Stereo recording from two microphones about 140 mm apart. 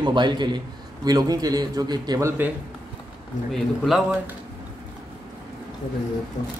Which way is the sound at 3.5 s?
Centre (ahead or behind).